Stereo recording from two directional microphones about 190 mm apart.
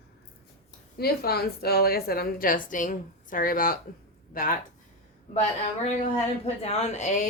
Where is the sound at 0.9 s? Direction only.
55° left (ahead or behind).